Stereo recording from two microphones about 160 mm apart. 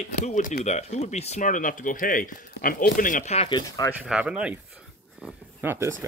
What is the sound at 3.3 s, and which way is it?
Speech, 40° left (ahead or behind).